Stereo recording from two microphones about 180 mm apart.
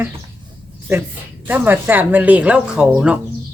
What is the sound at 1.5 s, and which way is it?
Speech, 10° right (ahead or behind).